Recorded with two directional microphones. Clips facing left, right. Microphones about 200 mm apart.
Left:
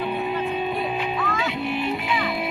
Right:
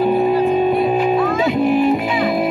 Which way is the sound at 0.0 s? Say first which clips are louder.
Right 11 dB; 40° right (ahead or behind).